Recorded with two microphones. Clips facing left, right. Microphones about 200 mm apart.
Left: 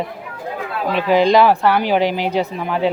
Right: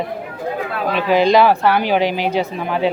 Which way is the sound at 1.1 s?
10° right (ahead or behind).